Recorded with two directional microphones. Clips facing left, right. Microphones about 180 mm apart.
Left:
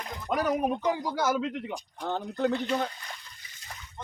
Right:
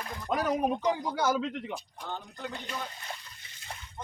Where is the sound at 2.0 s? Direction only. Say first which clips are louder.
Left 15 dB; 50° left (ahead or behind).